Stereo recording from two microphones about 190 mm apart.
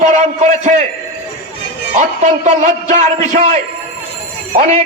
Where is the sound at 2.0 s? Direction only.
40° right (ahead or behind).